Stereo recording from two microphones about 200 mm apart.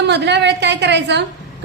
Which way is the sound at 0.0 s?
60° right (ahead or behind).